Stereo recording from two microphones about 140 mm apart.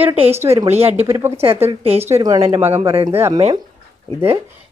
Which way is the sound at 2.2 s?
25° right (ahead or behind).